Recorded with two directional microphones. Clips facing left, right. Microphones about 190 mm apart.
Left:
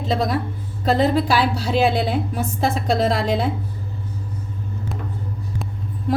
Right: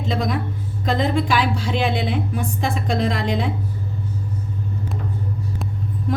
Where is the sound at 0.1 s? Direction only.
40° left (ahead or behind).